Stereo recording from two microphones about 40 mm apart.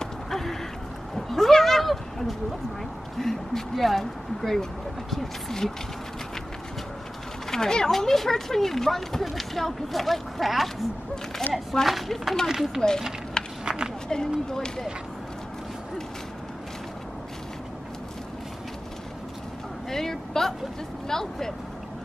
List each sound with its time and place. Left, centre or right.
0.0 s a sound: centre
1.1 s cat: centre
3.2 s speech: centre
7.5 s speech: centre
11.8 s speech: centre
13.4 s run: centre
13.7 s a sound: centre
14.0 s speech: centre
19.9 s a sound: centre
21.1 s speech: centre